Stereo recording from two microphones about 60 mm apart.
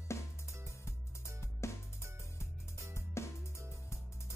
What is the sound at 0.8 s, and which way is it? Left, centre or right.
Music, left.